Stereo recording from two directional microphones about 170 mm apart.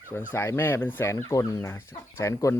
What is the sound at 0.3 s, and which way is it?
Speech, 15° left (ahead or behind).